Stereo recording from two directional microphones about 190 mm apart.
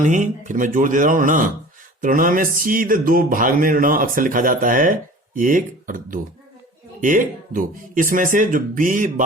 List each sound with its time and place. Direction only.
0.0 s speech: 40° right (ahead or behind)